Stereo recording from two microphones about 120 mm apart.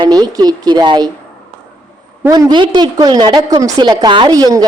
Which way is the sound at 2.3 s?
35° right (ahead or behind).